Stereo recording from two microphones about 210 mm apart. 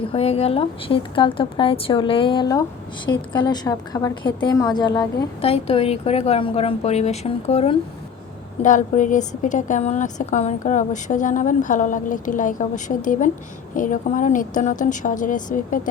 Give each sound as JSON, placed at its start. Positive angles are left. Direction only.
{"t": 0.1, "sound": "a woman's voice", "side_deg": 30}